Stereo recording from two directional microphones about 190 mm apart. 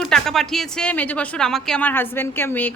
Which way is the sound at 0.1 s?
Centre (ahead or behind).